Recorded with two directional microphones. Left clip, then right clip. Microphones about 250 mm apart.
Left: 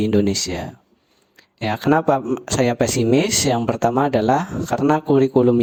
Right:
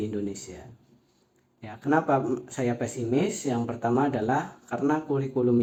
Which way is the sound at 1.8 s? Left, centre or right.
Left.